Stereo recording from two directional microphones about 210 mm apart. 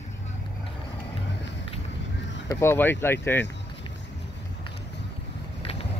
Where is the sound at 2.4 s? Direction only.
10° left (ahead or behind).